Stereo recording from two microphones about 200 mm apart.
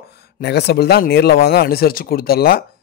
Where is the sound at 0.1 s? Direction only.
55° left (ahead or behind).